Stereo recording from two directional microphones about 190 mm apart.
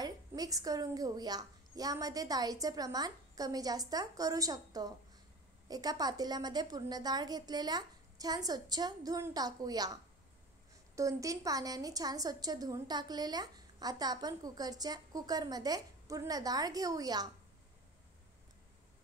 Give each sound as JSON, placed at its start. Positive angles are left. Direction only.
{"t": 0.0, "sound": "a woman's voice", "side_deg": -20}
{"t": 11.0, "sound": "a woman's voice", "side_deg": -15}